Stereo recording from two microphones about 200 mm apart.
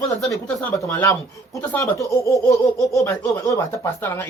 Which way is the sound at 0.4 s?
10° left (ahead or behind).